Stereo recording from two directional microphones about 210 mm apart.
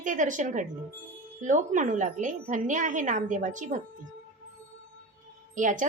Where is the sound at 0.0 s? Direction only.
40° right (ahead or behind).